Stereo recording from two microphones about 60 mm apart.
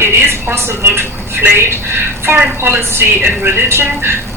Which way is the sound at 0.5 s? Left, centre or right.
Right.